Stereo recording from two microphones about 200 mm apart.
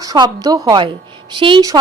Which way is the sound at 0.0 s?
20° right (ahead or behind).